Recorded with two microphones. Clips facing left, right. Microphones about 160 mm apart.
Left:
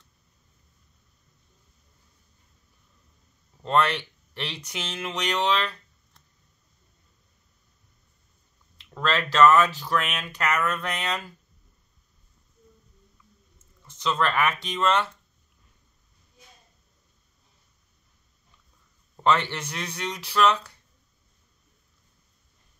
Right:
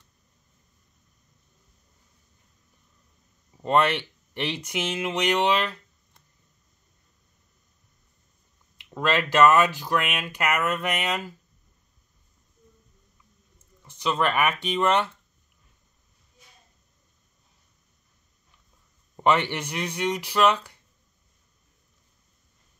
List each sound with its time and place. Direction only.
3.5 s speech: 15° right (ahead or behind)
8.7 s speech: 15° right (ahead or behind)
13.8 s speech: 15° right (ahead or behind)
19.1 s speech: 15° right (ahead or behind)